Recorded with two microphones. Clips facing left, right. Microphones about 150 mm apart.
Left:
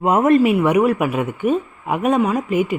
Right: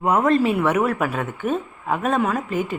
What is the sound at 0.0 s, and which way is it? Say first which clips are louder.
Speech: left 4 dB; 20° left (ahead or behind).